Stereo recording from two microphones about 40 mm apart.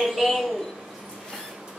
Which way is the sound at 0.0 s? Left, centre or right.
Centre.